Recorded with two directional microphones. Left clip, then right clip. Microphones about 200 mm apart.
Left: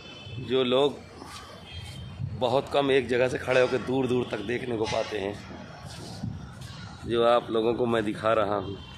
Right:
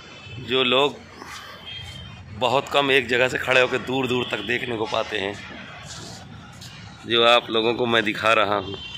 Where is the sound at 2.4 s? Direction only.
Centre (ahead or behind).